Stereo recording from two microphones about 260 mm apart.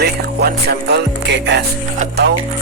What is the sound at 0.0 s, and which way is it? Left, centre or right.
Music, right.